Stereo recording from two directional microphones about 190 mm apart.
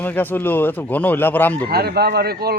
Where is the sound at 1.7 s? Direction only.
55° right (ahead or behind).